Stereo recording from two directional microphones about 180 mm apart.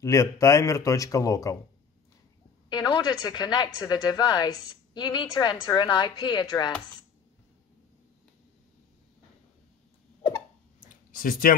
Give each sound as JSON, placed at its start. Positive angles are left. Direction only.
{"t": 0.0, "sound": "a man's voice", "side_deg": 15}
{"t": 2.7, "sound": "a woman's voice", "side_deg": 25}
{"t": 10.8, "sound": "a sound", "side_deg": 50}